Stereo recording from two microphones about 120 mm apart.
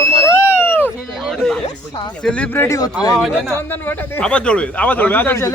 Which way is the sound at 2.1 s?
10° left (ahead or behind).